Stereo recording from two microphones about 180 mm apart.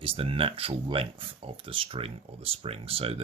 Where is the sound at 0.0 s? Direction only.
30° right (ahead or behind).